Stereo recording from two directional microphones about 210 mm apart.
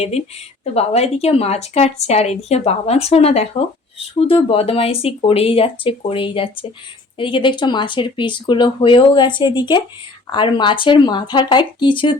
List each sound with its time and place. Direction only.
0.6 s speech: 30° left (ahead or behind)